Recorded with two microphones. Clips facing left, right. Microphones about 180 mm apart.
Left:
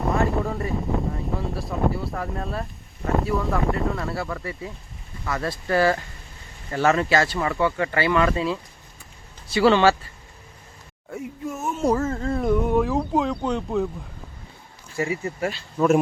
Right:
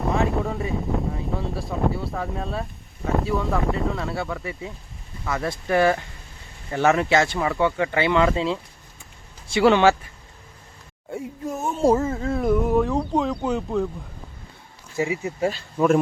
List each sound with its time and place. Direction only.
0.0 s a sound: centre (ahead or behind)
5.3 s speech: 15° right (ahead or behind)
11.1 s speech: 30° right (ahead or behind)
11.9 s speech: 10° right (ahead or behind)
14.9 s speech: 15° right (ahead or behind)